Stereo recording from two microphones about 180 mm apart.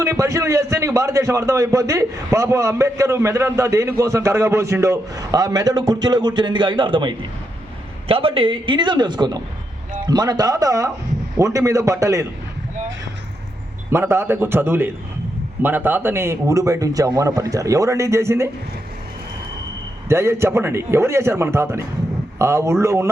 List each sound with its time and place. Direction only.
0.0 s a man's voice: 15° right (ahead or behind)
13.9 s a man's voice: 15° right (ahead or behind)
20.1 s a man's voice: 15° right (ahead or behind)